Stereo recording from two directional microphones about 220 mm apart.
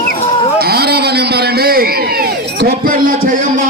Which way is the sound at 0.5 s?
45° right (ahead or behind).